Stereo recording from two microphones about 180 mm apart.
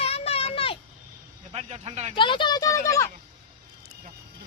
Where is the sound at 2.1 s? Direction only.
25° left (ahead or behind).